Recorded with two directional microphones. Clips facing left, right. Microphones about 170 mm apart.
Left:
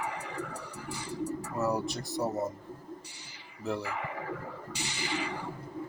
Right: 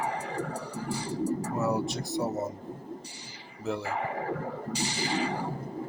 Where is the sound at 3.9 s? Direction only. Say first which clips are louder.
Right 5 dB; 35° right (ahead or behind).